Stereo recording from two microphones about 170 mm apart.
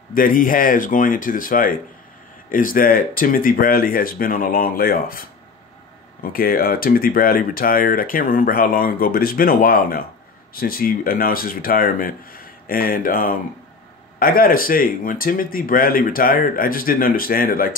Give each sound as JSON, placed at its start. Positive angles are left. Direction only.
{"t": 0.1, "sound": "speech", "side_deg": 55}
{"t": 6.3, "sound": "speech", "side_deg": 60}